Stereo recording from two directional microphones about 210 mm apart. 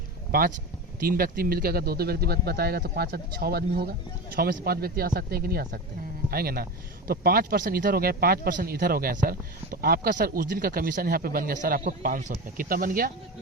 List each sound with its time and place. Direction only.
0.3 s speech: 45° right (ahead or behind)